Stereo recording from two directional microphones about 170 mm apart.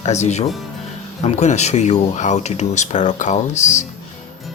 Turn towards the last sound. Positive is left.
turn(degrees=45)  # may be behind; listen again after turning